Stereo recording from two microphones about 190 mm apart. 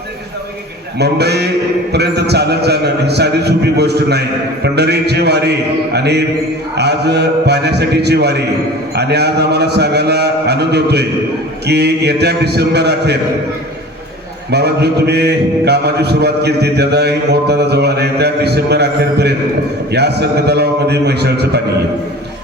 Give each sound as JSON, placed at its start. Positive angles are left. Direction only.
{"t": 0.9, "sound": "a man's voice", "side_deg": -60}
{"t": 14.5, "sound": "a man's voice", "side_deg": -60}